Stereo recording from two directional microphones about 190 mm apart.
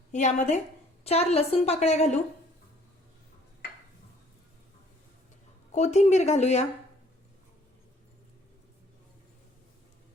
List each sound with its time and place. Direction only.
0.1 s a woman's voice: 40° left (ahead or behind)
5.7 s a woman's voice: 35° left (ahead or behind)